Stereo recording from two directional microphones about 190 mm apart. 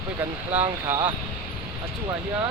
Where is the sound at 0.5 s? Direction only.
10° right (ahead or behind).